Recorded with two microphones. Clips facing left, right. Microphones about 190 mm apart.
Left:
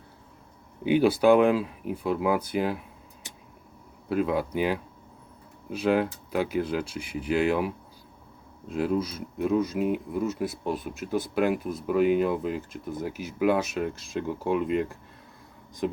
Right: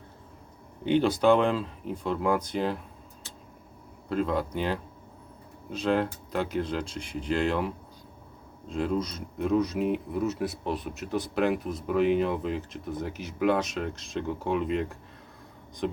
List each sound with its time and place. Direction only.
0.9 s speech: 10° left (ahead or behind)
4.1 s speech: 10° left (ahead or behind)
8.7 s speech: 5° left (ahead or behind)